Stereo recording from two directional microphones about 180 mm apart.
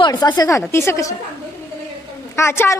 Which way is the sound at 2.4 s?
15° left (ahead or behind).